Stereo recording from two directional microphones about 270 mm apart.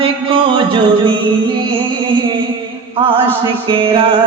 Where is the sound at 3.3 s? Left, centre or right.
Centre.